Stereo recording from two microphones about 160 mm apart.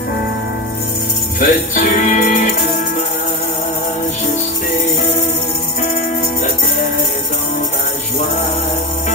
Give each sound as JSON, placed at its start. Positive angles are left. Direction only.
{"t": 1.4, "sound": "speech", "side_deg": 55}